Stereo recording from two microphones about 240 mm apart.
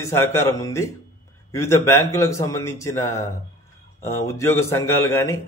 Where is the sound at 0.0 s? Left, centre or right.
Centre.